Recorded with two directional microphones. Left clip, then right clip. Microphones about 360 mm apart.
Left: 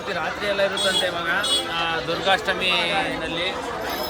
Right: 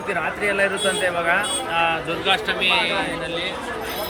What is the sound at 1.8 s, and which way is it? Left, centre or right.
Speech, centre.